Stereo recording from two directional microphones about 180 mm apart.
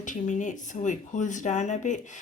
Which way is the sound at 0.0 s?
45° left (ahead or behind).